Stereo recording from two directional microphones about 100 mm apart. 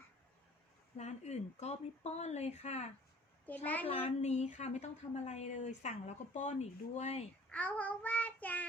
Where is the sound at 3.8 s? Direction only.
70° left (ahead or behind); by 4.8 s 90° left.